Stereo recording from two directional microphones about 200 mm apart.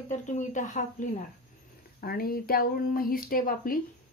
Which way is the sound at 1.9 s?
50° left (ahead or behind).